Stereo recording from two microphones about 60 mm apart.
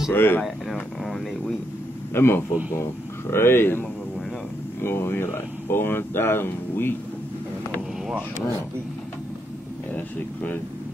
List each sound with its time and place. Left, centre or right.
0.1 s speech: left
1.0 s speech: centre
2.1 s speech: left
4.8 s speech: left
9.9 s speech: left